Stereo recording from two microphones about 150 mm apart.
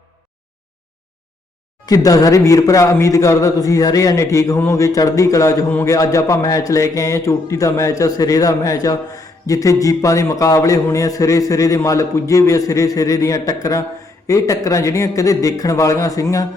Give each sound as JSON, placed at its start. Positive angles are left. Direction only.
{"t": 1.9, "sound": "a man's voice", "side_deg": 25}